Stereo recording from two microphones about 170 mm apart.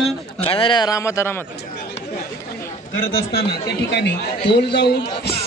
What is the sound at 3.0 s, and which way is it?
A man's voice, 65° left (ahead or behind).